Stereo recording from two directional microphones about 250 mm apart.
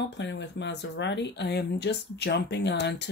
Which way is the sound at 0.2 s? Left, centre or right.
Left.